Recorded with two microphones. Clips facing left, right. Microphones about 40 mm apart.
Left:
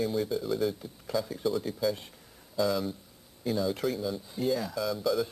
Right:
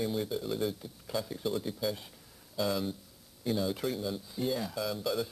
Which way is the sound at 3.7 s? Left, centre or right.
Centre.